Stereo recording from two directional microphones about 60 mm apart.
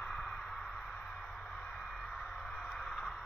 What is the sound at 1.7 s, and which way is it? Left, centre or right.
Music, centre.